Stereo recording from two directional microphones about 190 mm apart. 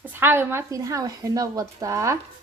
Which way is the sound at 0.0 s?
10° right (ahead or behind).